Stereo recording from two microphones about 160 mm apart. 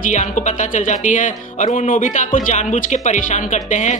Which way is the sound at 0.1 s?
50° left (ahead or behind).